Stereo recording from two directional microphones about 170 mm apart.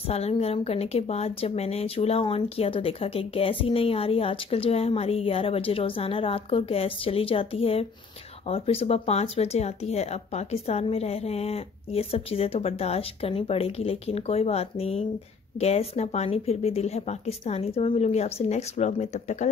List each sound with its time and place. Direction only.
0.1 s a woman's voice: 35° left (ahead or behind)